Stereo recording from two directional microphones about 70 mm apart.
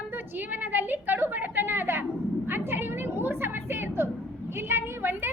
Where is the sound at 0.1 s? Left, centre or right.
Right.